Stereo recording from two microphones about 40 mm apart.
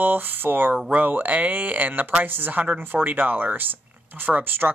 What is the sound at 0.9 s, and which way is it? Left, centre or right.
Speech, right.